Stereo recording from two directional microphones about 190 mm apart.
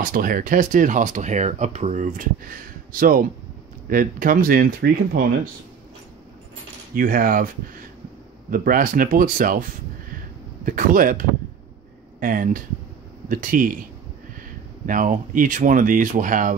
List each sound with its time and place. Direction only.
0.0 s speech: 45° right (ahead or behind)
7.0 s speech: 50° right (ahead or behind)
8.5 s speech: 45° right (ahead or behind)
14.9 s speech: 45° right (ahead or behind)